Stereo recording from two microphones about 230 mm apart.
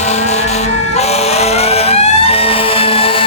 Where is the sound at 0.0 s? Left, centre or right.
Left.